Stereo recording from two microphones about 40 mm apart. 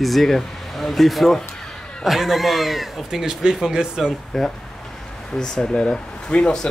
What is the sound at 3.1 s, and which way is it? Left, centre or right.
Speech, centre.